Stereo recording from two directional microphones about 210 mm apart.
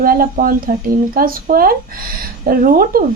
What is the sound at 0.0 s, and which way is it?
A woman's voice, 45° right (ahead or behind).